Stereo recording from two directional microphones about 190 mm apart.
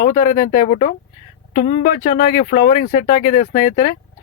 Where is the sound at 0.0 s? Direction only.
45° left (ahead or behind).